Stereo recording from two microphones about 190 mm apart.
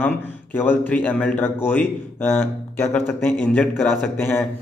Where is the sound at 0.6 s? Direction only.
10° left (ahead or behind).